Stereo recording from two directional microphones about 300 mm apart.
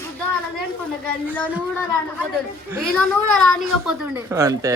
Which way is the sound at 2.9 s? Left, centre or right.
Centre.